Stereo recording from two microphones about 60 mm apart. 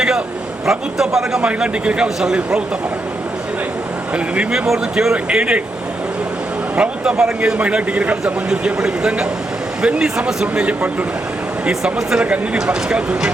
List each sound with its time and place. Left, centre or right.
0.6 s a man's voice: centre
4.1 s a man's voice: centre
5.1 s speech: centre
6.7 s a man's voice: centre
11.7 s a man's voice: centre